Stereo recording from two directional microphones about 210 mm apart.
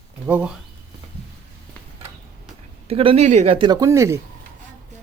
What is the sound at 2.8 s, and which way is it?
Speech, 25° right (ahead or behind).